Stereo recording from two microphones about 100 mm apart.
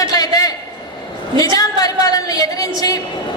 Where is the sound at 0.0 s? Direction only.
35° left (ahead or behind).